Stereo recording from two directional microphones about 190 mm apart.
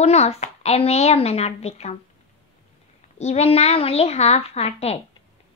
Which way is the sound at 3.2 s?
35° left (ahead or behind).